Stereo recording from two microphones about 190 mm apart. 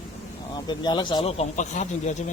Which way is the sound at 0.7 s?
25° left (ahead or behind).